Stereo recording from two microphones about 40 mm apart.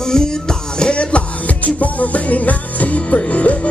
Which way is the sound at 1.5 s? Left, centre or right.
Left.